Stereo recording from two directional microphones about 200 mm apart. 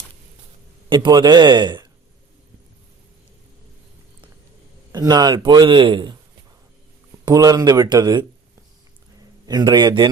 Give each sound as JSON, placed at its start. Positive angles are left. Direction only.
{"t": 0.9, "sound": "a man's voice", "side_deg": -20}
{"t": 4.9, "sound": "a man's voice", "side_deg": -20}
{"t": 7.3, "sound": "a man's voice", "side_deg": -20}
{"t": 9.5, "sound": "a man's voice", "side_deg": -20}